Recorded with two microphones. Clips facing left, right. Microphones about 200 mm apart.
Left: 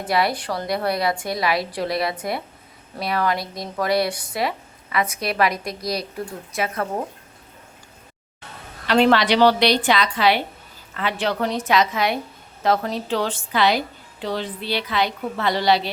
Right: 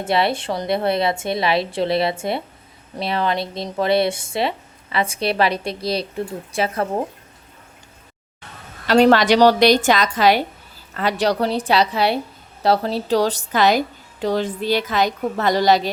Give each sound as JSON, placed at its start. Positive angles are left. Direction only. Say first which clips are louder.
{"t": 0.0, "sound": "speech", "louder": "right 2 dB", "side_deg": -25}
{"t": 8.9, "sound": "a woman's voice", "louder": "right 3 dB", "side_deg": -40}